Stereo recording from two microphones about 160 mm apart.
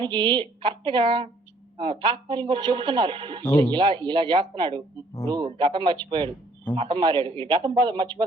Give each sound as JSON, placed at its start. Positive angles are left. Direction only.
{"t": 0.0, "sound": "a man's voice", "side_deg": -30}